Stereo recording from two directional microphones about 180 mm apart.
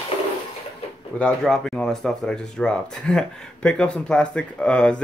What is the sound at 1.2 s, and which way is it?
Speech, 5° left (ahead or behind).